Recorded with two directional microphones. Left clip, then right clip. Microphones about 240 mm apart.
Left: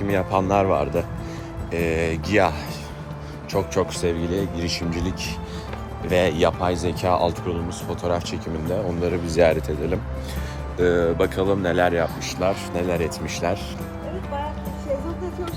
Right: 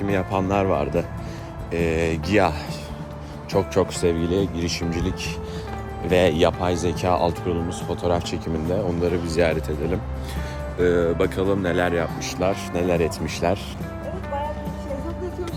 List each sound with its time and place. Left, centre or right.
0.0 s speech: centre
3.8 s speech: centre
9.3 s speech: centre